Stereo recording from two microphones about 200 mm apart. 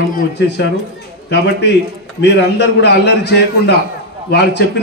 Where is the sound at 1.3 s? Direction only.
60° left (ahead or behind).